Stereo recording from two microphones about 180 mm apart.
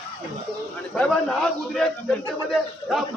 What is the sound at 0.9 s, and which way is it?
A man's voice, 5° left (ahead or behind).